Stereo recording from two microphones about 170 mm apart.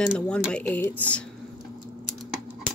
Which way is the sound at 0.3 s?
5° left (ahead or behind).